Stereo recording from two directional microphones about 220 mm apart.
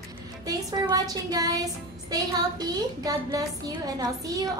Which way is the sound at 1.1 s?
15° right (ahead or behind).